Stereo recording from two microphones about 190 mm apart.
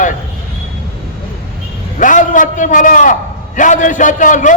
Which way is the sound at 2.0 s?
45° left (ahead or behind).